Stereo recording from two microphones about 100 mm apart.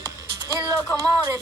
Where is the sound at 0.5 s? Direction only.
35° right (ahead or behind).